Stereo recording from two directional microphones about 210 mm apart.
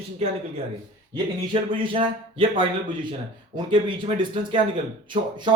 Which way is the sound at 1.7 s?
25° right (ahead or behind).